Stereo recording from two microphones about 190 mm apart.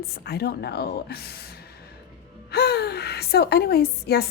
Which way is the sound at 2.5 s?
55° left (ahead or behind).